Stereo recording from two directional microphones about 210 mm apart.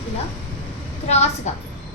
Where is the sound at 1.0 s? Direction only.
30° left (ahead or behind).